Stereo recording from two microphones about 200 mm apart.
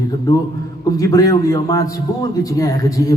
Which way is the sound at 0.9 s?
20° left (ahead or behind).